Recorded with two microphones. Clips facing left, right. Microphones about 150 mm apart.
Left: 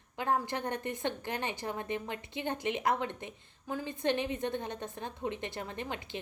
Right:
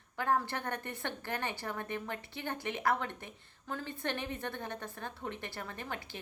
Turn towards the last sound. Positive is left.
turn(degrees=20)  # may be behind; listen again after turning